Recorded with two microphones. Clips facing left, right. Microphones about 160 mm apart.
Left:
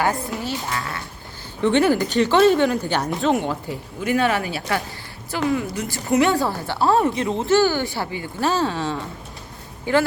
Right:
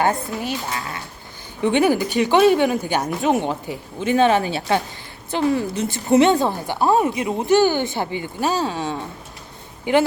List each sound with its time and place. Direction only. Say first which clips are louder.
0.0 s a woman's voice: right 2 dB; 20° right (ahead or behind)